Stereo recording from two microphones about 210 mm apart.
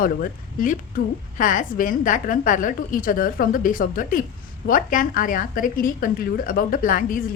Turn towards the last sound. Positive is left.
turn(degrees=40)  # may be behind; listen again after turning